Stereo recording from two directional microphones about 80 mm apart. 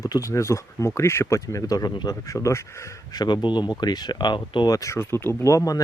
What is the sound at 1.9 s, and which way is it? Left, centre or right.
Speech, left.